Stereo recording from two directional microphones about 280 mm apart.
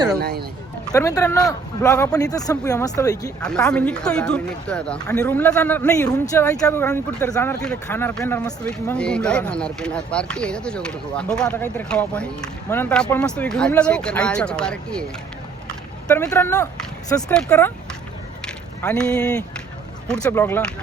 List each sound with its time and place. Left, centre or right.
0.2 s a man's voice: right
0.9 s speech: centre
16.0 s speech: centre
18.4 s a sound: centre
20.1 s speech: centre